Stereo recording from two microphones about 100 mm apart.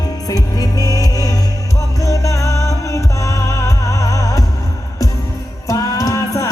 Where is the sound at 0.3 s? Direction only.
40° left (ahead or behind).